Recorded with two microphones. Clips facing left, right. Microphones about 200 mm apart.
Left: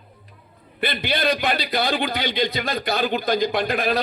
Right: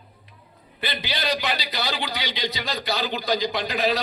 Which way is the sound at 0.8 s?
55° left (ahead or behind).